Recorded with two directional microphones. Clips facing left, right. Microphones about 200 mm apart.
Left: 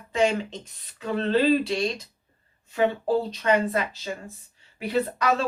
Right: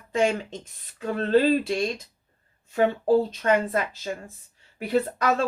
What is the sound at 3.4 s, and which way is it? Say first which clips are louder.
Speech: even; 50° right (ahead or behind).